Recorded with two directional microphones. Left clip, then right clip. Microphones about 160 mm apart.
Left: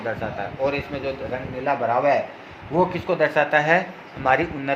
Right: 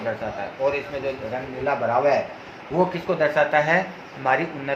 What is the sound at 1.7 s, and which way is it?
Speech, 55° left (ahead or behind).